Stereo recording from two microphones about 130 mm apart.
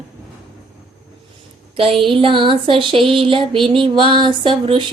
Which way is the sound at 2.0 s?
40° right (ahead or behind).